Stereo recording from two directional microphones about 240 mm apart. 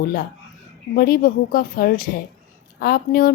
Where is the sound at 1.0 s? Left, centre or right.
Left.